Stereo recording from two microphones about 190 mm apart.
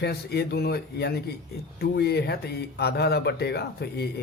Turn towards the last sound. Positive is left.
turn(degrees=60)  # may be behind; listen again after turning